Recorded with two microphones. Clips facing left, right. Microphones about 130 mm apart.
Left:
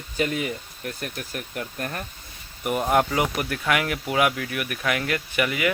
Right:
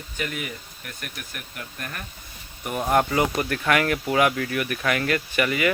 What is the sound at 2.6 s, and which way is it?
Speech, centre (ahead or behind).